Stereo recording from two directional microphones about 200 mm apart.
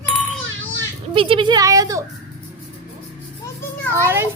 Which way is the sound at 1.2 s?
25° right (ahead or behind).